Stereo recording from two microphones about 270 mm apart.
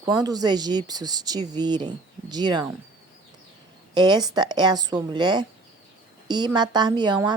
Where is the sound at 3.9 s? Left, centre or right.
Centre.